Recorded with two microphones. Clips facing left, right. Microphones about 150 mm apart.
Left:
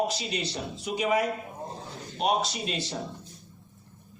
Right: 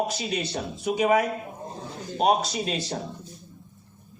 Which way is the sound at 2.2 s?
45° right (ahead or behind).